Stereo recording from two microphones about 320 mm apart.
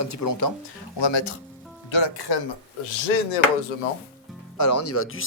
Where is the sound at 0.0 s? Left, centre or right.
Left.